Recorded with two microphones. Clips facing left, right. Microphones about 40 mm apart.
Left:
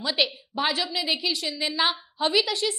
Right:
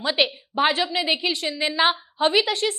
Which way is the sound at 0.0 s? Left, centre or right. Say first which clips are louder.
Right 3 dB; right.